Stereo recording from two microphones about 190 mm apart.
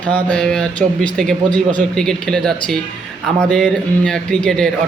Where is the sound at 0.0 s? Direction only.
5° left (ahead or behind).